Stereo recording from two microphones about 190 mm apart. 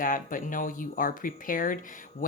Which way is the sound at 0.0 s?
45° left (ahead or behind).